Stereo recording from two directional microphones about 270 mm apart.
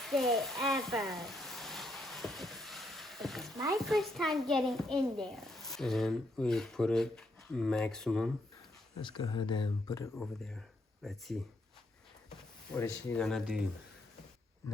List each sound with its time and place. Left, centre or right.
0.0 s a sound: centre
3.8 s a child's voice: centre
9.0 s speech: centre
10.2 s a child's voice: centre
12.7 s a child's voice: centre